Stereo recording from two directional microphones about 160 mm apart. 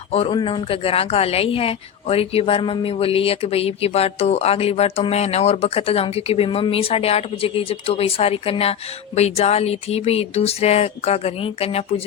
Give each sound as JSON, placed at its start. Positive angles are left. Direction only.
{"t": 0.1, "sound": "a man's voice", "side_deg": 40}